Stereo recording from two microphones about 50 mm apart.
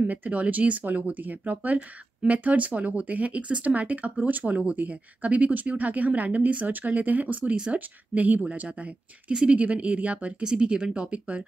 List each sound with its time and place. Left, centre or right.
0.0 s speech: right